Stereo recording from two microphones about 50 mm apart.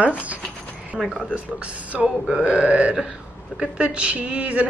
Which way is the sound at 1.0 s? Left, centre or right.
Centre.